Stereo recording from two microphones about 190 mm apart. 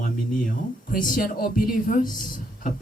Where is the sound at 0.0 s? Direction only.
45° left (ahead or behind).